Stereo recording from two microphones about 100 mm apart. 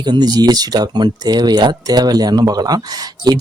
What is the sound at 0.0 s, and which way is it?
Speech, 45° right (ahead or behind).